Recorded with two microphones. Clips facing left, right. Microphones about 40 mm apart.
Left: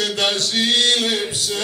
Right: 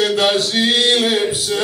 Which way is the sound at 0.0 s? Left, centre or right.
Centre.